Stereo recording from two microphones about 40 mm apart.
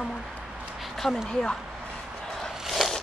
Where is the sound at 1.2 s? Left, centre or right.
Centre.